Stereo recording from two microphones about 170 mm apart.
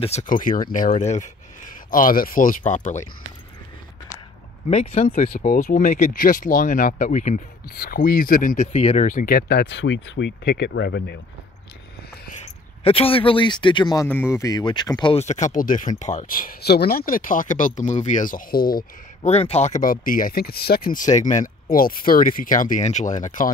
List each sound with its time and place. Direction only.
0.0 s speech: 45° left (ahead or behind)
0.9 s speech: 40° left (ahead or behind)
4.6 s speech: 40° left (ahead or behind)
7.7 s speech: 60° left (ahead or behind)
12.8 s speech: 35° left (ahead or behind)
14.0 s speech: 10° left (ahead or behind)
15.1 s speech: 45° left (ahead or behind); by 18.9 s 60° left (ahead or behind)
19.2 s speech: 40° left (ahead or behind)